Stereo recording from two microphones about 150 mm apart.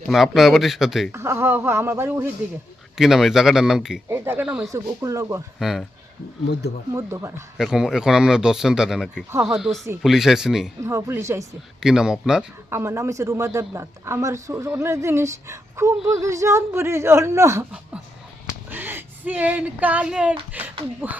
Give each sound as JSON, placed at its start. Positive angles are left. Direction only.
{"t": 0.1, "sound": "speech", "side_deg": 0}
{"t": 1.1, "sound": "speech", "side_deg": -15}
{"t": 3.0, "sound": "speech", "side_deg": -5}
{"t": 4.1, "sound": "speech", "side_deg": -15}
{"t": 4.4, "sound": "speech", "side_deg": -5}
{"t": 4.7, "sound": "a man's voice", "side_deg": -20}
{"t": 5.5, "sound": "speech", "side_deg": 0}
{"t": 6.9, "sound": "speech", "side_deg": -20}
{"t": 7.6, "sound": "speech", "side_deg": -5}
{"t": 10.8, "sound": "a man's voice", "side_deg": -15}
{"t": 11.8, "sound": "speech", "side_deg": -5}
{"t": 12.7, "sound": "a man's voice", "side_deg": -20}
{"t": 18.7, "sound": "speech", "side_deg": -15}